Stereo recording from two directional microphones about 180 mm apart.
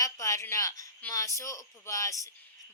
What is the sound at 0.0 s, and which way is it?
A woman's voice, 20° left (ahead or behind).